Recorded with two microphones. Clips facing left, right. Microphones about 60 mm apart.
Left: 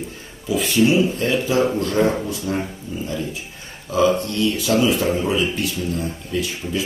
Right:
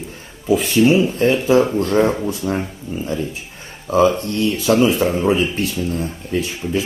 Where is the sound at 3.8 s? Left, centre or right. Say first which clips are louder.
Right 3 dB; right.